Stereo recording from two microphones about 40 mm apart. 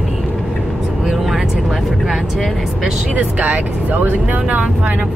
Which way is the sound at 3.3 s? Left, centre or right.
Right.